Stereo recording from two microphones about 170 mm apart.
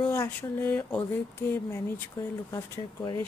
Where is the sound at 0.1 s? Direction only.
15° left (ahead or behind).